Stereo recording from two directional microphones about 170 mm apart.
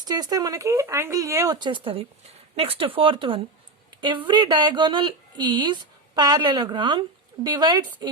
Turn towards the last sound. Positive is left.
turn(degrees=-25)  # may be behind; listen again after turning